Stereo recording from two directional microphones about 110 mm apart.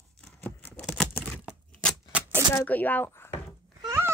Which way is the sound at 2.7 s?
15° left (ahead or behind).